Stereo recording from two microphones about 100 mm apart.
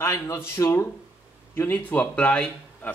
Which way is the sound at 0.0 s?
25° left (ahead or behind).